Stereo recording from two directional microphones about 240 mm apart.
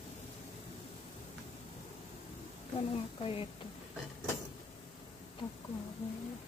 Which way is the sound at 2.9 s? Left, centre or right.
Left.